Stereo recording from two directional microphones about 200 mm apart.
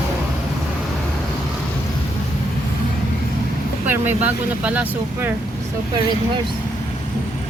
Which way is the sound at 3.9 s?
10° right (ahead or behind).